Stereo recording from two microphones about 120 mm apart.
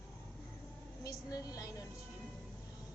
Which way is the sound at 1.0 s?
30° left (ahead or behind).